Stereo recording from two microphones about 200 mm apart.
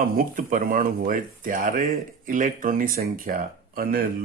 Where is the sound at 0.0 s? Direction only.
45° right (ahead or behind).